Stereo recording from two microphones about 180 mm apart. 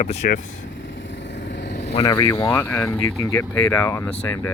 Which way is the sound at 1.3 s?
80° left.